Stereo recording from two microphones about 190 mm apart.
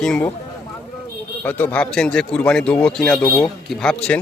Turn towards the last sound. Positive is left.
turn(degrees=5)  # may be behind; listen again after turning